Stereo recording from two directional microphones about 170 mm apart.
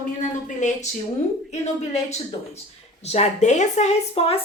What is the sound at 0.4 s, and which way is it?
Speech, 45° left (ahead or behind).